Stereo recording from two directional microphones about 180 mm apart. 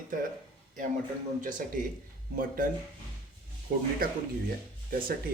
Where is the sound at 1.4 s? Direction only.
50° right (ahead or behind).